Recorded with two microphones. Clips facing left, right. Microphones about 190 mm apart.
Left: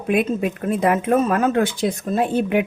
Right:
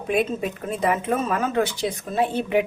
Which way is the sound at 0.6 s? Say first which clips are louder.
Left 4 dB; 55° left (ahead or behind).